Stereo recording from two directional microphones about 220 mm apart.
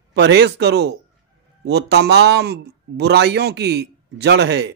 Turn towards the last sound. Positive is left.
turn(degrees=-50)  # may be behind; listen again after turning